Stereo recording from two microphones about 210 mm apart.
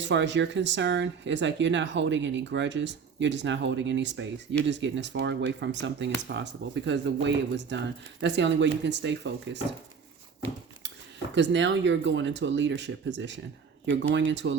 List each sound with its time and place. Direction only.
0.0 s speech: 60° right (ahead or behind)
11.3 s speech: 60° right (ahead or behind)